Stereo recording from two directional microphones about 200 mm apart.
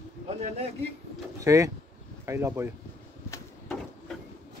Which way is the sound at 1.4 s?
15° right (ahead or behind).